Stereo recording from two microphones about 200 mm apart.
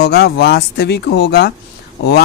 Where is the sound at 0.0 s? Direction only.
55° left (ahead or behind).